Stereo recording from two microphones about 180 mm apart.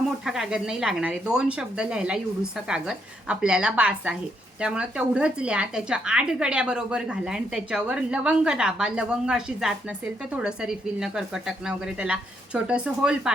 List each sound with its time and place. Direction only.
0.3 s a woman's voice: 5° right (ahead or behind)